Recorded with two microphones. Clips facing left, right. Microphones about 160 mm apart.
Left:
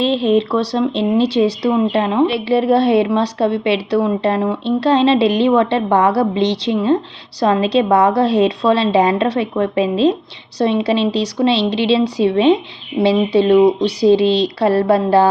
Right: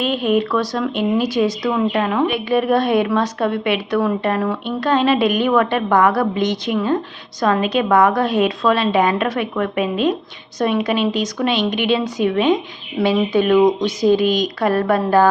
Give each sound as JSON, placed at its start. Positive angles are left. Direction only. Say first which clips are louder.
{"t": 0.0, "sound": "speech", "louder": "left 3 dB", "side_deg": 30}